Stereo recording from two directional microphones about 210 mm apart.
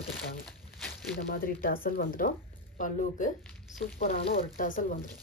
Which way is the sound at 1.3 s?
45° left (ahead or behind).